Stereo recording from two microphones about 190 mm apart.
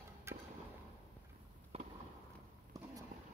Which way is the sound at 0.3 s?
15° right (ahead or behind).